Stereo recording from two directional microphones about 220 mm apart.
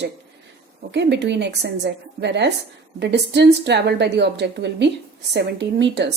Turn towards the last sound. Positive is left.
turn(degrees=-50)  # may be behind; listen again after turning